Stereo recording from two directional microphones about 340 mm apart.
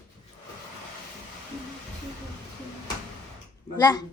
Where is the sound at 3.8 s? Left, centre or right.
Centre.